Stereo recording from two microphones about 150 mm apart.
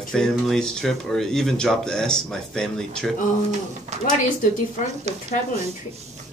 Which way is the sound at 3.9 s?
50° right (ahead or behind).